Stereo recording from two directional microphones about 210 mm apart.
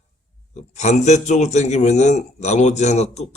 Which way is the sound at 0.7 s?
35° left (ahead or behind).